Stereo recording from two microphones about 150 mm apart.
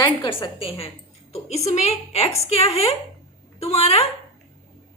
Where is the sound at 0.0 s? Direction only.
30° left (ahead or behind).